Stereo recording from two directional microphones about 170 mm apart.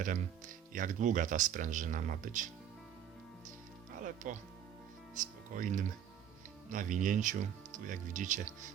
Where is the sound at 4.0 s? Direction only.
50° right (ahead or behind).